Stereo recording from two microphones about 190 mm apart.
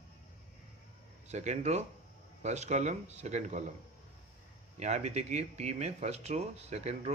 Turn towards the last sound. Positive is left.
turn(degrees=-35)  # may be behind; listen again after turning